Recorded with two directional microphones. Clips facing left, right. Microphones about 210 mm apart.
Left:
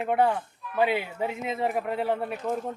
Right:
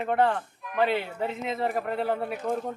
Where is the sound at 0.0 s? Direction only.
10° left (ahead or behind).